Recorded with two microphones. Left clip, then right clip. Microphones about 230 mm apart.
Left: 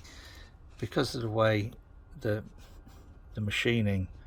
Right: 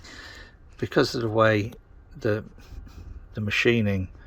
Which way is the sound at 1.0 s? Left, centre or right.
Centre.